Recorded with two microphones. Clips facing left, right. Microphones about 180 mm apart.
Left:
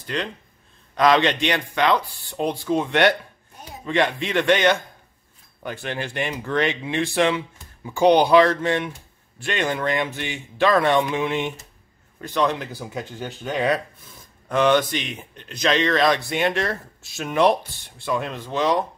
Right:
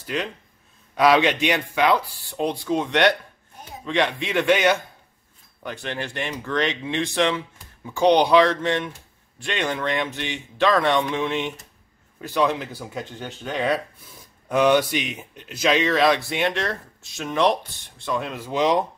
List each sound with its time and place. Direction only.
0.0 s speech: 5° right (ahead or behind)
5.6 s speech: 5° left (ahead or behind)
12.2 s speech: 5° right (ahead or behind)
14.5 s speech: 10° right (ahead or behind)